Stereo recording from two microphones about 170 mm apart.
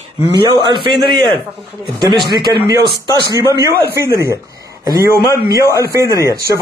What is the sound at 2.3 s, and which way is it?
Speech, 25° right (ahead or behind).